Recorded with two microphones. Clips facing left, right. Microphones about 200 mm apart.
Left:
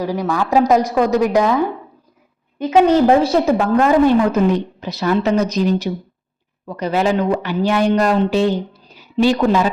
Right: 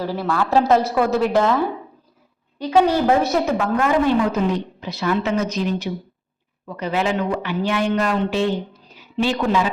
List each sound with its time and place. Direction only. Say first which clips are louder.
0.0 s a woman's voice: left 3 dB; 15° left (ahead or behind); by 4.1 s 35° left (ahead or behind)
4.3 s speech: left 5 dB; 45° left (ahead or behind)